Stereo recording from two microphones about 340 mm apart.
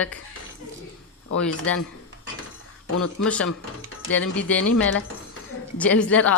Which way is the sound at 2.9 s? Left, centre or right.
Left.